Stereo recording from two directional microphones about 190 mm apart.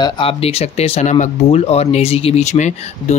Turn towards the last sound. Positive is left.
turn(degrees=40)  # may be behind; listen again after turning